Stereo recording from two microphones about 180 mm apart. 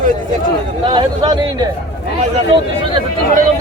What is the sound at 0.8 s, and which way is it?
Speech, 25° right (ahead or behind).